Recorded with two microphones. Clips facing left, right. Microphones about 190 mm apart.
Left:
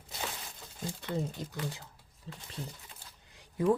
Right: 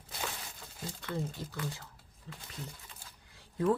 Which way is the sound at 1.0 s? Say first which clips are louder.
Left 2 dB; 20° left (ahead or behind).